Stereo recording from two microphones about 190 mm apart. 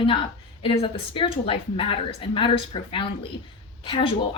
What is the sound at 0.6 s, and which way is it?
A woman's voice, 30° left (ahead or behind).